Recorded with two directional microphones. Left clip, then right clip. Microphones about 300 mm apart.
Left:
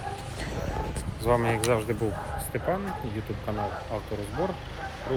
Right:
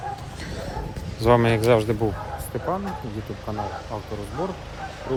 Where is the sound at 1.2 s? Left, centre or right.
Right.